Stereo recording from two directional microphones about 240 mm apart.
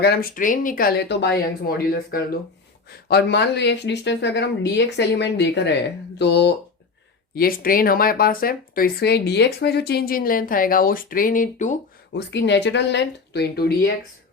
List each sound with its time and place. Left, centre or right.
0.0 s speech: left
12.1 s speech: left